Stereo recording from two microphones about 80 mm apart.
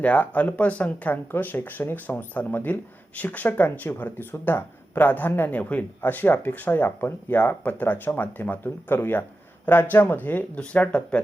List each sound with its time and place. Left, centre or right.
0.0 s speech: centre